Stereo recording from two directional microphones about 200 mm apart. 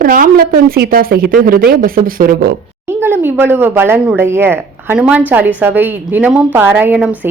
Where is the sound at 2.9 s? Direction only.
10° right (ahead or behind).